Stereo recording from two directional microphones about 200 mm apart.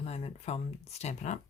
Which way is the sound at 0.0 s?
30° left (ahead or behind).